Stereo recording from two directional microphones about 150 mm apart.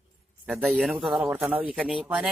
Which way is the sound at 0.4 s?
10° right (ahead or behind).